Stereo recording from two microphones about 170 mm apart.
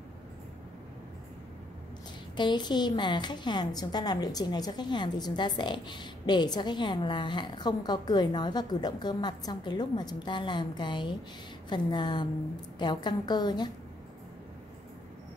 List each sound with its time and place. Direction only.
2.3 s a woman's voice: 25° left (ahead or behind)